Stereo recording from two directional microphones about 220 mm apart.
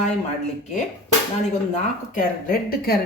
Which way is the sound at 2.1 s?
40° left (ahead or behind).